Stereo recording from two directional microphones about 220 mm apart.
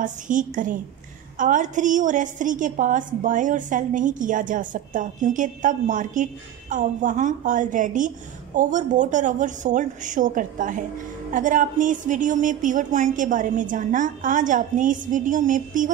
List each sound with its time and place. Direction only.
0.0 s a woman's voice: 35° right (ahead or behind)